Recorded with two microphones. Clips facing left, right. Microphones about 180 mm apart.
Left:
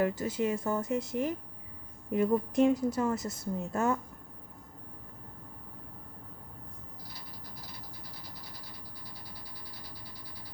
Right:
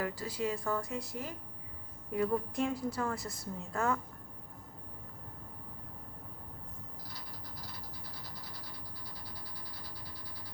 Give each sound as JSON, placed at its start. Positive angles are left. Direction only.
{"t": 0.0, "sound": "a woman's voice", "side_deg": 20}